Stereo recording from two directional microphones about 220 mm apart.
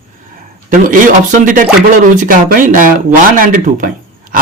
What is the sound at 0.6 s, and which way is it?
Speech, 35° right (ahead or behind).